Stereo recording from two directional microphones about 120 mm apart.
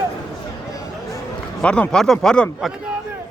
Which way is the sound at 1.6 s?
10° left (ahead or behind).